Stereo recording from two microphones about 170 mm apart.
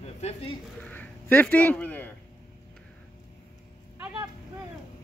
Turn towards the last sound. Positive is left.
turn(degrees=-10)  # may be behind; listen again after turning